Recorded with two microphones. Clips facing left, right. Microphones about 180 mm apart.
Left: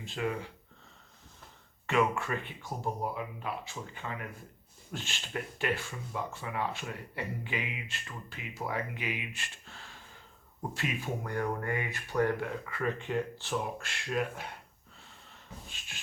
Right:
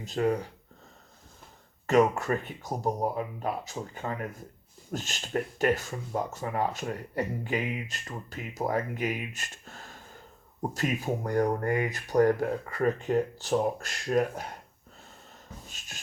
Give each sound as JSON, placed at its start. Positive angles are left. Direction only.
{"t": 0.0, "sound": "speech", "side_deg": -40}
{"t": 1.9, "sound": "speech", "side_deg": -40}